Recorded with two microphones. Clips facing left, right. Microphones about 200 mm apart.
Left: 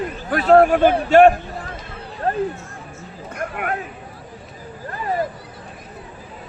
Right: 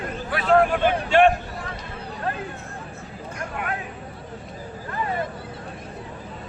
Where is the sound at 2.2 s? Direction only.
40° left (ahead or behind).